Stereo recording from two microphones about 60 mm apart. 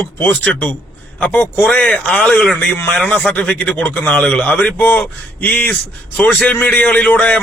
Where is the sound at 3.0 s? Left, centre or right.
Centre.